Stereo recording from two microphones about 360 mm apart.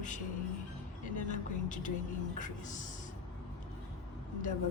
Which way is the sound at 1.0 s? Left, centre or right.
Left.